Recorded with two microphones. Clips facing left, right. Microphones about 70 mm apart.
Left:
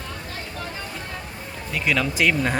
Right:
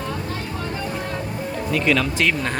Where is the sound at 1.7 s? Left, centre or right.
Centre.